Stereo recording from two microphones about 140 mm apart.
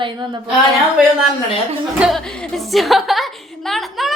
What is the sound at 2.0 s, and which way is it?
Music, centre (ahead or behind).